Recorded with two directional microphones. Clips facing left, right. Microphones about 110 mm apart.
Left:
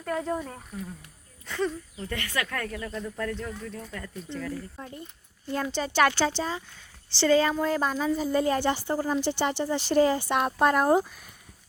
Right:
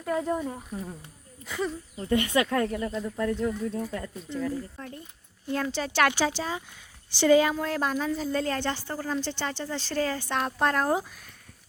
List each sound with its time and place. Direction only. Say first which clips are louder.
0.0 s speech: right 2 dB; 5° right (ahead or behind)
0.8 s speech: right 1 dB; 30° right (ahead or behind)
1.5 s speech: left 2 dB; 10° right (ahead or behind)
2.1 s speech: right 8 dB; 20° right (ahead or behind)
4.8 s speech: even; 10° left (ahead or behind); by 7.5 s 10° right (ahead or behind)
7.5 s speech: left 2 dB; centre (ahead or behind)